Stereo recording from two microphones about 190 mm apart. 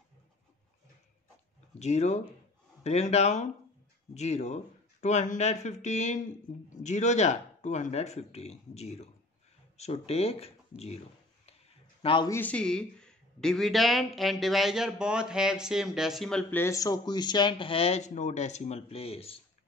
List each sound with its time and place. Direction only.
1.8 s speech: 35° left (ahead or behind)
12.0 s a man's voice: 25° left (ahead or behind)
12.3 s speech: 10° left (ahead or behind); by 19.4 s 30° left (ahead or behind)